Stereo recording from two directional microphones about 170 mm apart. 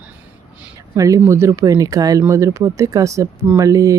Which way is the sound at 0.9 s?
20° right (ahead or behind).